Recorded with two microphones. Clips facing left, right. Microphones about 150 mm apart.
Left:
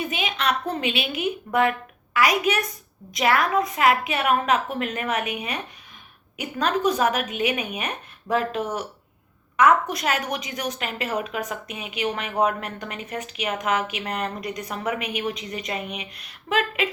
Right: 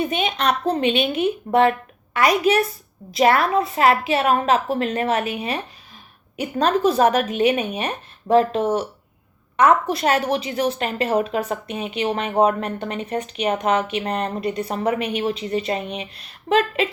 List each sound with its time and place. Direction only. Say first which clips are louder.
0.0 s a woman's voice: right 5 dB; 35° right (ahead or behind)